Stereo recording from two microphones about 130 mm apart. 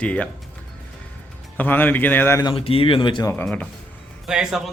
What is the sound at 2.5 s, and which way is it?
Speech, 45° left (ahead or behind).